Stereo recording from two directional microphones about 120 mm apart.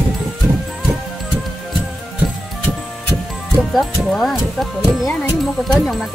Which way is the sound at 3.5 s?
Centre (ahead or behind).